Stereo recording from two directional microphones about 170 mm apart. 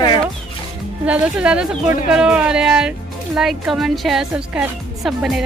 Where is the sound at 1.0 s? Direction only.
5° right (ahead or behind).